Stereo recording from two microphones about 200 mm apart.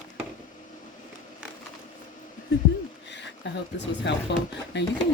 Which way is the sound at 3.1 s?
65° left (ahead or behind).